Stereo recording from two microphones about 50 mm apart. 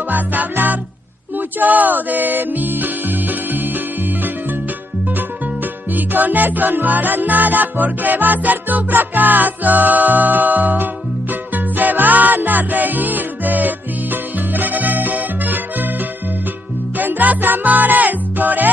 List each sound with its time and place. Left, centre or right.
0.1 s music: right
5.9 s music: right
17.0 s music: right